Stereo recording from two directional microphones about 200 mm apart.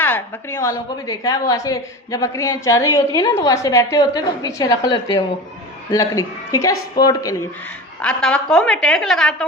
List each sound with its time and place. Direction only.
0.0 s a woman's voice: 10° left (ahead or behind)
8.0 s a woman's voice: 5° left (ahead or behind)